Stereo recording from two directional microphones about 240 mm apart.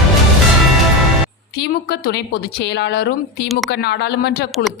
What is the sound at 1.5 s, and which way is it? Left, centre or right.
A woman's voice, left.